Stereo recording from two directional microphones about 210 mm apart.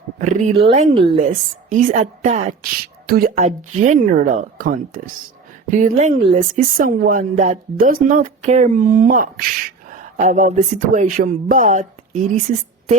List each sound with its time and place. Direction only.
0.2 s speech: 35° right (ahead or behind)
3.3 s speech: 35° right (ahead or behind)